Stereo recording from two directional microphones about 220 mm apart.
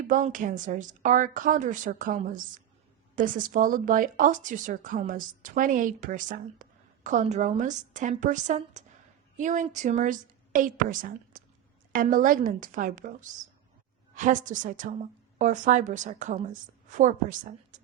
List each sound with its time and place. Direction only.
0.1 s a woman's voice: 35° right (ahead or behind)